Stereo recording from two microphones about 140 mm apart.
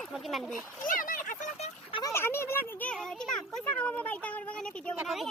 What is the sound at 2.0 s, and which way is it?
A child's voice, 20° left (ahead or behind).